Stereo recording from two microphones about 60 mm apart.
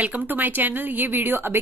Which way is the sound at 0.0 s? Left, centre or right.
Right.